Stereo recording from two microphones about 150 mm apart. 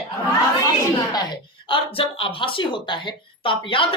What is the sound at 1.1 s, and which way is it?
Speech, 30° left (ahead or behind).